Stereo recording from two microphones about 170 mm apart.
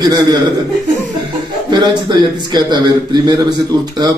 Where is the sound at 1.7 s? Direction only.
25° right (ahead or behind).